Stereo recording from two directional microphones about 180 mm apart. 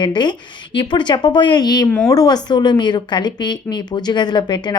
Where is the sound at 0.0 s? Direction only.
25° left (ahead or behind).